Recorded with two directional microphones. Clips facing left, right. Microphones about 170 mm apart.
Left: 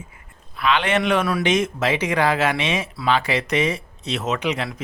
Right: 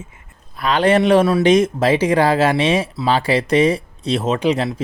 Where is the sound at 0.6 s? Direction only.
40° right (ahead or behind).